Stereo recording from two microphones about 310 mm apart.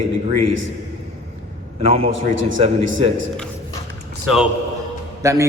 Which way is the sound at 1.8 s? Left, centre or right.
Centre.